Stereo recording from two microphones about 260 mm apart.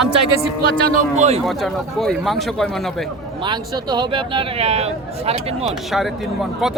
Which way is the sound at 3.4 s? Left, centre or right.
Centre.